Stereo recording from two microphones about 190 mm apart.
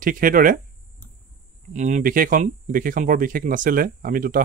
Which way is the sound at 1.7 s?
40° right (ahead or behind).